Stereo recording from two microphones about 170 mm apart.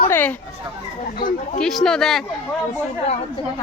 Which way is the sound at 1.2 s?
55° left (ahead or behind).